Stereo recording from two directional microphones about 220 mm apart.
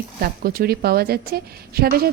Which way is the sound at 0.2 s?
45° right (ahead or behind).